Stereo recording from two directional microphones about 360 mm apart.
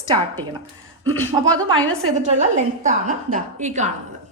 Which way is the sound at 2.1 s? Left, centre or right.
Centre.